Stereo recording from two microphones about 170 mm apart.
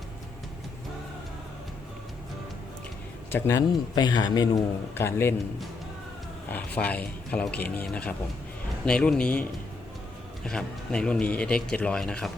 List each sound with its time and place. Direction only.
3.3 s a man's voice: 15° left (ahead or behind)
6.5 s speech: 10° left (ahead or behind)